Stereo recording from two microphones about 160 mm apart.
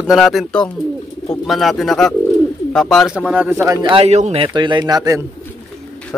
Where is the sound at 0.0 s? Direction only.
Centre (ahead or behind); by 3.9 s 20° right (ahead or behind).